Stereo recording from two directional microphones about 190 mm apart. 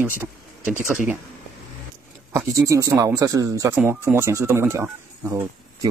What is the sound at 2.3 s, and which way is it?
Speech, 15° right (ahead or behind).